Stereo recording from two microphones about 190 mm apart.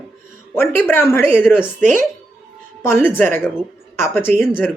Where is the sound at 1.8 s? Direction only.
45° right (ahead or behind).